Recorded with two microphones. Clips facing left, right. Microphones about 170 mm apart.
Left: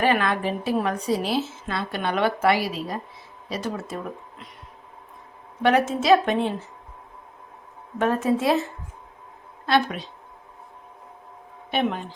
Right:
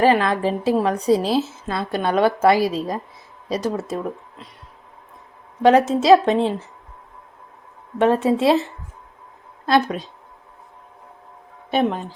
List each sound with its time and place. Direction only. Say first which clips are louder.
0.0 s a woman's voice: right 5 dB; 30° right (ahead or behind)
5.6 s a woman's voice: right 5 dB; 35° right (ahead or behind)
8.0 s a woman's voice: right 5 dB; 25° right (ahead or behind)
9.6 s a woman's voice: right 4 dB; 40° right (ahead or behind)
11.7 s a woman's voice: right 4 dB; 40° right (ahead or behind)